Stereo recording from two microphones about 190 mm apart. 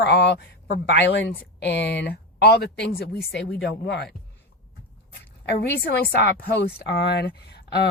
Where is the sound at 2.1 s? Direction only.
55° left (ahead or behind).